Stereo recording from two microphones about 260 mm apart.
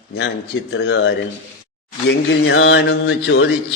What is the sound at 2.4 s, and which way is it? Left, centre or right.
A man's voice, left.